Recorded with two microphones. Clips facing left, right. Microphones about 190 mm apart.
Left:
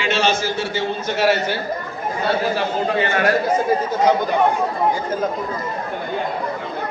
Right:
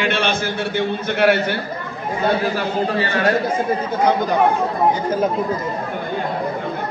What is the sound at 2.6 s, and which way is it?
Speech, 35° right (ahead or behind).